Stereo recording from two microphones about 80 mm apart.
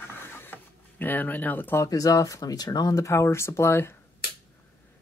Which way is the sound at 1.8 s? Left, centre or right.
Left.